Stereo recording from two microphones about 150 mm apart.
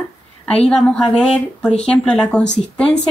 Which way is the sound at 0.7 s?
5° left (ahead or behind).